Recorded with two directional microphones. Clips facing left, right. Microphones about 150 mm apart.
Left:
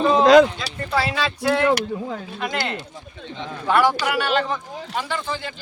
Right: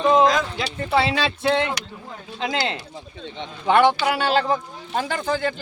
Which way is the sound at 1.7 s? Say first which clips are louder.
Left 10 dB; 60° left (ahead or behind).